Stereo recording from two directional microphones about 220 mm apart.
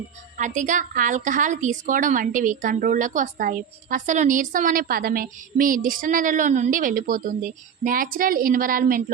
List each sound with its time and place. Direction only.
0.3 s a woman's voice: 35° right (ahead or behind)